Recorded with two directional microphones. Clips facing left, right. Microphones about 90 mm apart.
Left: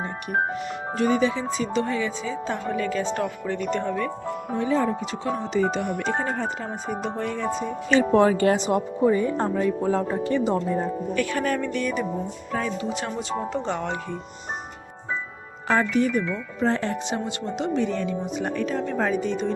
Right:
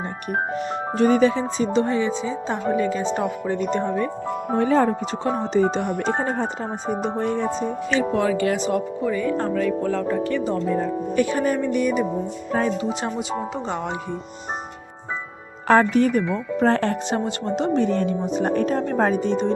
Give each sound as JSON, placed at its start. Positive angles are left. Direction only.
{"t": 0.5, "sound": "speech", "side_deg": -35}
{"t": 4.5, "sound": "speech", "side_deg": -55}
{"t": 5.2, "sound": "speech", "side_deg": -40}
{"t": 7.9, "sound": "speech", "side_deg": 35}
{"t": 8.5, "sound": "speech", "side_deg": 25}
{"t": 11.1, "sound": "speech", "side_deg": -20}
{"t": 12.5, "sound": "speech", "side_deg": -35}
{"t": 12.8, "sound": "speech", "side_deg": -20}
{"t": 13.1, "sound": "speech", "side_deg": -10}
{"t": 15.6, "sound": "speech", "side_deg": -50}